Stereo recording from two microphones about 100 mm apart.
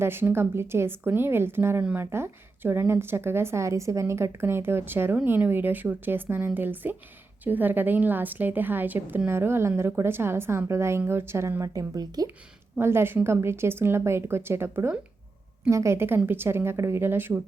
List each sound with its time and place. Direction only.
0.0 s a woman's voice: 20° right (ahead or behind); by 12.3 s 40° right (ahead or behind)
12.8 s a woman's voice: 25° right (ahead or behind)